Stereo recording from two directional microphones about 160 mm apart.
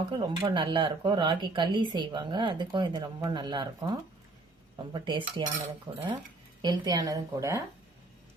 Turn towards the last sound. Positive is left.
turn(degrees=-20)  # may be behind; listen again after turning